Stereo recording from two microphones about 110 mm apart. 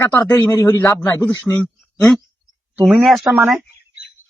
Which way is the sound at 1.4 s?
15° left (ahead or behind).